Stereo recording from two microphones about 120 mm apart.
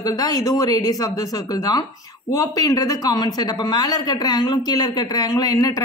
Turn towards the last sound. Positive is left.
turn(degrees=30)  # may be behind; listen again after turning